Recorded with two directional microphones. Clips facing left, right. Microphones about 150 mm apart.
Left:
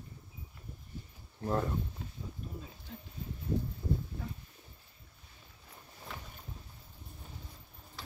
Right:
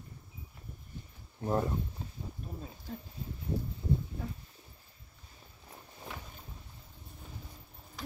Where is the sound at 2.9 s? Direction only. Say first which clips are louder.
Right 6 dB; 40° right (ahead or behind).